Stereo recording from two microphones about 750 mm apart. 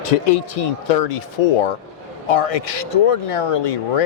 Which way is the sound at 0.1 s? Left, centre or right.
Left.